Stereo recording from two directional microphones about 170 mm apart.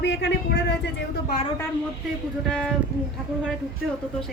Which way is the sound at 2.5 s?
5° left (ahead or behind).